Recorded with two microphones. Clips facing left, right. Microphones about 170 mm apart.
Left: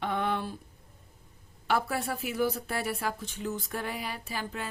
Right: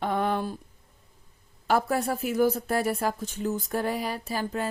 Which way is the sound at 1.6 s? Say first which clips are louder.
Right 5 dB; 40° right (ahead or behind).